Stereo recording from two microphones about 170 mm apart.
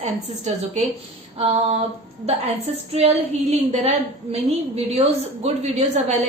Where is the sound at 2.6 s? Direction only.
40° right (ahead or behind).